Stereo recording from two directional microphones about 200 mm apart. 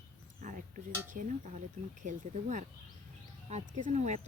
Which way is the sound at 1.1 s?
40° right (ahead or behind).